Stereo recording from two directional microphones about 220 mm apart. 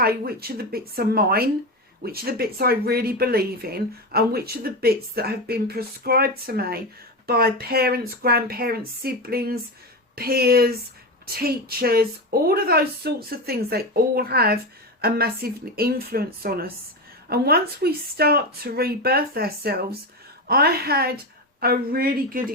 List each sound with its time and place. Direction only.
0.0 s speech: 45° right (ahead or behind)